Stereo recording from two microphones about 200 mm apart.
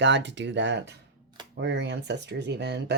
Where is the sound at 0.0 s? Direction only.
65° right (ahead or behind).